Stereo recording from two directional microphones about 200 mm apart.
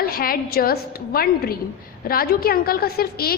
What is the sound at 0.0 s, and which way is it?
A woman's voice, 45° left (ahead or behind).